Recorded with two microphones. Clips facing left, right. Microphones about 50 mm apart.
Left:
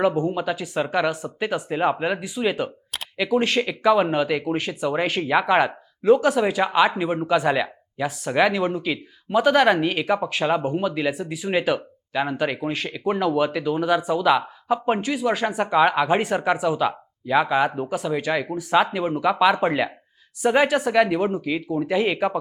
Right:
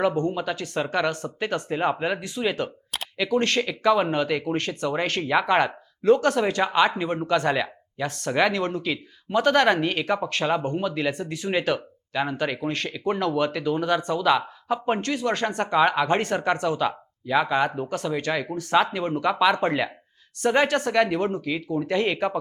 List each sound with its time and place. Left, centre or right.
0.0 s speech: centre